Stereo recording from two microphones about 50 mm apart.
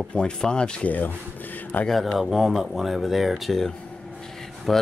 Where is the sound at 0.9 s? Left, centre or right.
Left.